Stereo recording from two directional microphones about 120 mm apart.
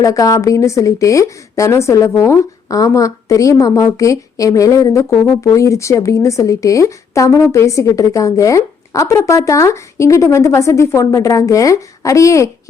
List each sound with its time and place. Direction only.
0.0 s speech: 30° left (ahead or behind)